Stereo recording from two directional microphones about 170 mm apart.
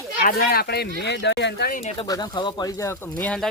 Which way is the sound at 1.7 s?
55° left (ahead or behind).